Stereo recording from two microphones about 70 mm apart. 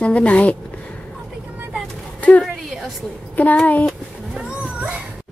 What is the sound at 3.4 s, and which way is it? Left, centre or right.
Speech, left.